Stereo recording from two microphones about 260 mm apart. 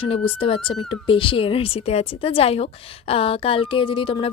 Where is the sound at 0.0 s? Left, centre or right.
Left.